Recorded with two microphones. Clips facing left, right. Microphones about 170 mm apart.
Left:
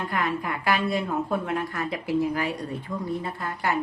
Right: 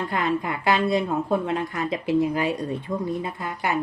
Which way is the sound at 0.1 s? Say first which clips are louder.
Right 3 dB; 25° right (ahead or behind).